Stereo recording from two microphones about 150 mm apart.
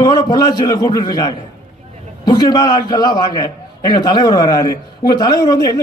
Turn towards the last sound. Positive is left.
turn(degrees=25)  # may be behind; listen again after turning